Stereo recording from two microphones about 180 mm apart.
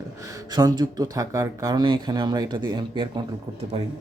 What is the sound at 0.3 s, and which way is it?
Speech, 20° right (ahead or behind).